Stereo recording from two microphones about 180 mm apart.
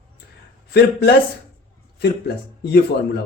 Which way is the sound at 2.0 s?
70° left (ahead or behind).